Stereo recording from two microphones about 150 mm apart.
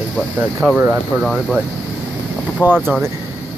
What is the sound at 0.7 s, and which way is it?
Speech, 10° right (ahead or behind).